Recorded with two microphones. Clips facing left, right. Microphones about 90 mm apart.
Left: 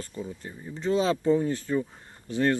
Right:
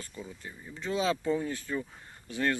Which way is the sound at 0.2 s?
30° left (ahead or behind).